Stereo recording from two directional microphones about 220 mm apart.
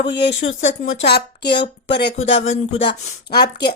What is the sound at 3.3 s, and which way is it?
Speech, 45° left (ahead or behind).